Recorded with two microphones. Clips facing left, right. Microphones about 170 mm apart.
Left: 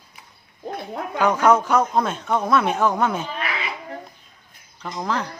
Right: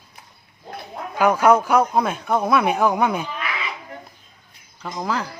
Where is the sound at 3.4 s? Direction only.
35° left (ahead or behind).